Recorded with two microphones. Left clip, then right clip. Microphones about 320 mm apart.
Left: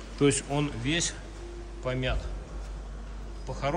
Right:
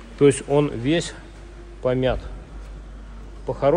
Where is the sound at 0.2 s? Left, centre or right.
Centre.